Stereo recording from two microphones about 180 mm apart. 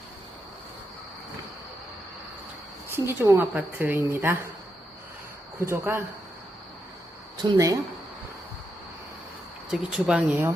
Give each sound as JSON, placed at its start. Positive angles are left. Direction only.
{"t": 2.9, "sound": "a woman's voice", "side_deg": -15}
{"t": 5.5, "sound": "a woman's voice", "side_deg": -15}
{"t": 7.4, "sound": "speech", "side_deg": -20}
{"t": 9.6, "sound": "speech", "side_deg": -5}